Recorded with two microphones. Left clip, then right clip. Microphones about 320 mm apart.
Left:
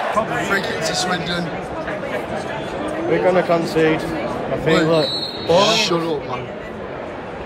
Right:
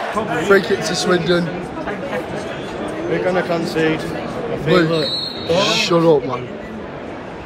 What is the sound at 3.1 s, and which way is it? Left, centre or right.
Speech, left.